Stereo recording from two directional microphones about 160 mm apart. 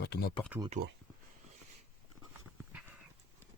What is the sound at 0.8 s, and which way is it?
Speech, 80° right.